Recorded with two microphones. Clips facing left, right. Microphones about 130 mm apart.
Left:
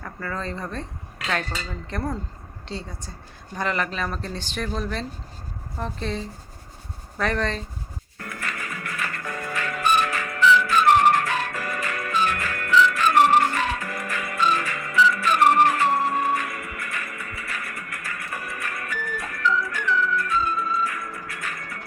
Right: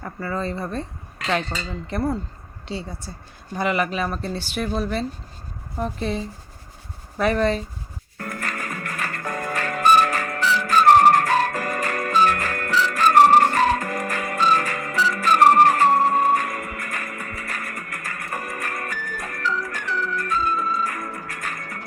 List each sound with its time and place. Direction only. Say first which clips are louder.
0.0 s speech: right 4 dB; 10° right (ahead or behind)
1.9 s speech: right 5 dB; 5° right (ahead or behind)
8.2 s music: right 3 dB; 45° right (ahead or behind)